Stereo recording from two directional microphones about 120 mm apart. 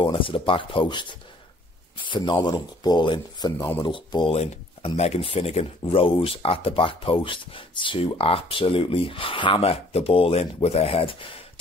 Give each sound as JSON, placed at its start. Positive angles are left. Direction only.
{"t": 0.0, "sound": "speech", "side_deg": 45}
{"t": 3.9, "sound": "speech", "side_deg": 40}
{"t": 4.3, "sound": "speech", "side_deg": 60}